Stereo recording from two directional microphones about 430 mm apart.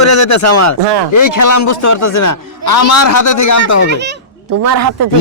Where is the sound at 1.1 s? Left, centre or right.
Left.